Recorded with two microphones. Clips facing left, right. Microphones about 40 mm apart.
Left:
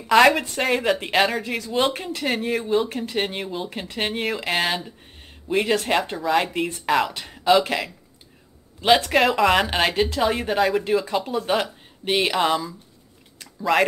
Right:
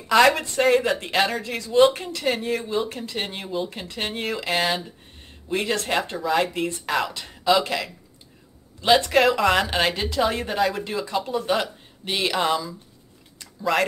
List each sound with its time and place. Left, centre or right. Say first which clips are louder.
0.1 s speech: left 2 dB; centre
2.9 s speech: left 4 dB; centre
3.8 s speech: left 3 dB; centre
4.1 s speech: even; centre
7.1 s speech: left 1 dB; left
7.3 s a sound: left 2 dB; centre
7.6 s speech: left 1 dB; centre
8.8 s a man's voice: even; centre